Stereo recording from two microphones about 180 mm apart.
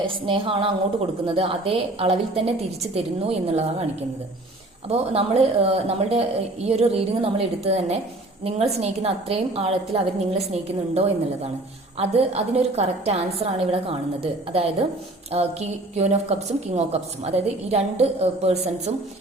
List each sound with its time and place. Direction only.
0.0 s a woman's voice: 30° right (ahead or behind)
4.9 s a woman's voice: 35° right (ahead or behind)